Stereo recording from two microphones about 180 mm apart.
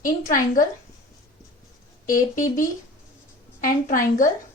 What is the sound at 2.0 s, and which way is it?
A woman's voice, 50° left (ahead or behind).